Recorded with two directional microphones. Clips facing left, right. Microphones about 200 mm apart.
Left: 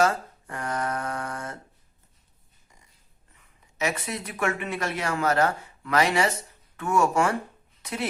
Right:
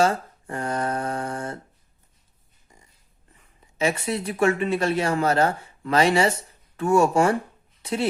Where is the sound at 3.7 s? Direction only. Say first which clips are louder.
Right 5 dB; 30° right (ahead or behind).